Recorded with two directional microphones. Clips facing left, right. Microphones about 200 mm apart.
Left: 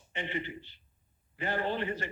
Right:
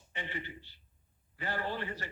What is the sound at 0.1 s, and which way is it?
A man's voice, 20° left (ahead or behind).